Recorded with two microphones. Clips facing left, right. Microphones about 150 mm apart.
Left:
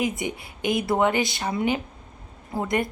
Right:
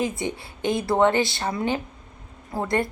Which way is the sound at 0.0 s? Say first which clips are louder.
Even; 20° left (ahead or behind).